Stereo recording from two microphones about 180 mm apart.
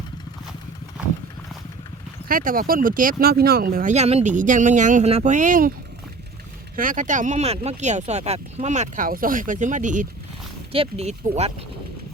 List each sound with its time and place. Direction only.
2.2 s speech: 50° right (ahead or behind)
3.9 s speech: 35° right (ahead or behind)
6.7 s speech: 45° right (ahead or behind)
10.7 s speech: 35° right (ahead or behind)